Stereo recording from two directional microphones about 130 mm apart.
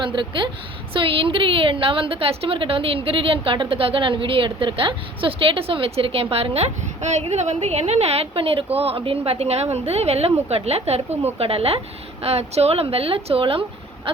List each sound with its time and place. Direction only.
0.0 s a woman's voice: 40° right (ahead or behind)